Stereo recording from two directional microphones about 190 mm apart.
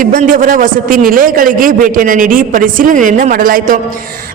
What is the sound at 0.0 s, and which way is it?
Speech, 45° right (ahead or behind).